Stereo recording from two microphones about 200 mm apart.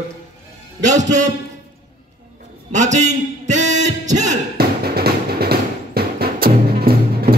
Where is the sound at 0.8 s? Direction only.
35° right (ahead or behind).